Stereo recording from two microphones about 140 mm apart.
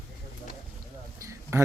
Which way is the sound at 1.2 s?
20° right (ahead or behind).